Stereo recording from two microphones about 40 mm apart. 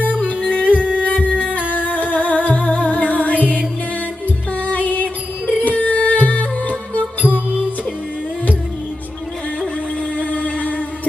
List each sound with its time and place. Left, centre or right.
0.0 s music: right
0.3 s music: left
5.6 s music: left
10.2 s music: left